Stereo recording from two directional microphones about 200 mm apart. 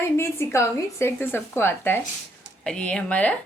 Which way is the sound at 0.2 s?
15° left (ahead or behind).